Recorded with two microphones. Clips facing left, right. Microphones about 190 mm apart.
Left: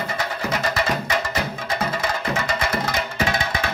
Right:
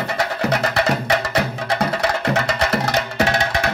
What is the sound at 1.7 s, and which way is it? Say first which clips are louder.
Music: right 5 dB; 65° right (ahead or behind).